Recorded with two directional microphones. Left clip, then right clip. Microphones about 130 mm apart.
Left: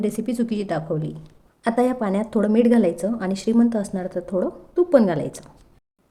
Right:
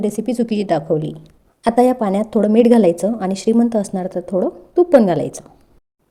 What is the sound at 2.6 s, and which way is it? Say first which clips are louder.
A woman's voice: right 6 dB; 35° right (ahead or behind).